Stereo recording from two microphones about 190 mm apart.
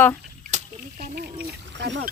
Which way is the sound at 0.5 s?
35° right (ahead or behind).